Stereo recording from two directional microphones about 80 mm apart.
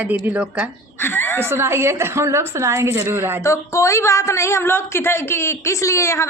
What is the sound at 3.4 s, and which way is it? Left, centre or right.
A woman's voice, left.